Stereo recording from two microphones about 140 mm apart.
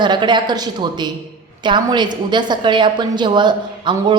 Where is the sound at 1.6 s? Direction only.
35° right (ahead or behind).